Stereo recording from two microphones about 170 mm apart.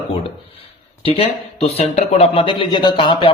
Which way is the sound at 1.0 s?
35° left (ahead or behind).